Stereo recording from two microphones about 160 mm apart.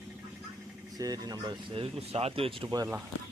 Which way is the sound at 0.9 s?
25° right (ahead or behind).